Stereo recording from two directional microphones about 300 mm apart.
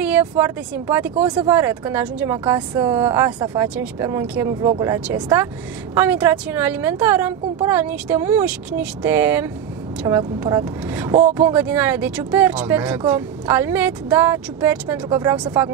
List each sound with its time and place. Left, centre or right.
0.0 s speech: centre